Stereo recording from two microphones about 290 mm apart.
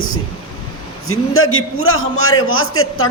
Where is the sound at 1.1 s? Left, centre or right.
Left.